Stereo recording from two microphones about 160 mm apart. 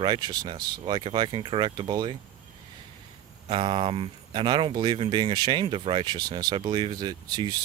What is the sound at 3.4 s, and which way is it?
Speech, 35° right (ahead or behind).